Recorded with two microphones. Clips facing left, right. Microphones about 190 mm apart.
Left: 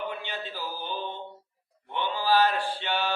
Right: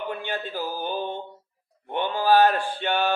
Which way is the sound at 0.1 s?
50° right (ahead or behind).